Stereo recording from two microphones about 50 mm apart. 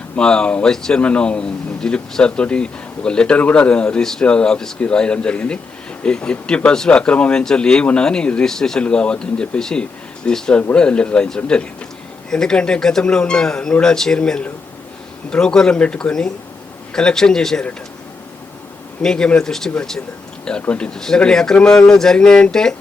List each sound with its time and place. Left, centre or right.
0.2 s speech: centre
19.0 s speech: centre